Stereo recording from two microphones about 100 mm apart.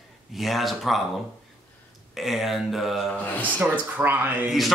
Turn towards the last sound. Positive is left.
turn(degrees=-20)  # may be behind; listen again after turning